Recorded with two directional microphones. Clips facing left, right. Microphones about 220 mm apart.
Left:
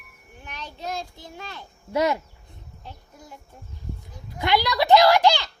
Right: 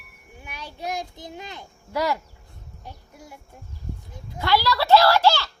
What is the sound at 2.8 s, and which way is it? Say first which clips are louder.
Music: right 1 dB; 10° right (ahead or behind).